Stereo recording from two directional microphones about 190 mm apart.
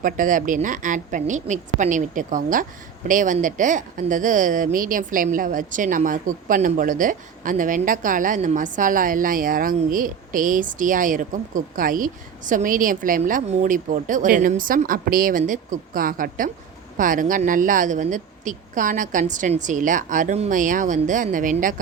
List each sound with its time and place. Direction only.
0.0 s speech: 45° right (ahead or behind)